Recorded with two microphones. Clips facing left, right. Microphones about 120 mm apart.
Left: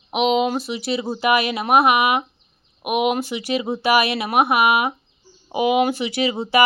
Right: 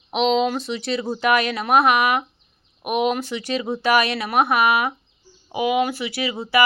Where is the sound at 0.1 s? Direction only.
10° left (ahead or behind).